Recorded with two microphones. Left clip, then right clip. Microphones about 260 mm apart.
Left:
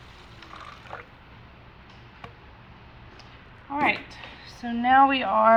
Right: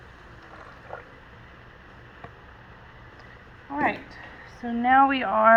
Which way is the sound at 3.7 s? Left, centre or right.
Centre.